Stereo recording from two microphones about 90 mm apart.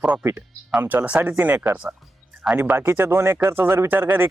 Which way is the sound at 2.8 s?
25° right (ahead or behind).